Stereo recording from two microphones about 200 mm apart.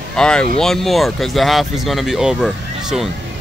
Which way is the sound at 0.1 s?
5° left (ahead or behind).